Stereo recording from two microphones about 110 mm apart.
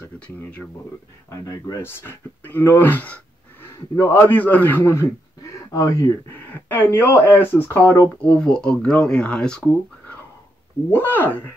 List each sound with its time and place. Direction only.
1.4 s speech: 30° left (ahead or behind)
8.4 s speech: 5° left (ahead or behind)
10.9 s speech: 20° left (ahead or behind)